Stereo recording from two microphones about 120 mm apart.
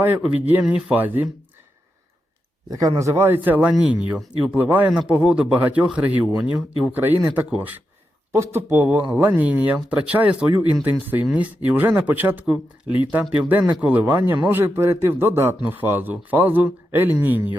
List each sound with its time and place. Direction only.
0.4 s speech: 10° right (ahead or behind)
2.6 s a man's voice: 30° right (ahead or behind)